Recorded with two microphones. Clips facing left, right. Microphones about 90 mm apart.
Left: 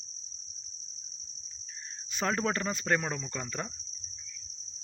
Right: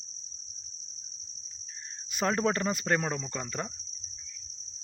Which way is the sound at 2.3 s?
30° right (ahead or behind).